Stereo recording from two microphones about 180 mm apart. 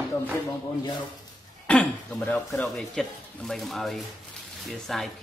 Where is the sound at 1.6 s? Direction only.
10° left (ahead or behind).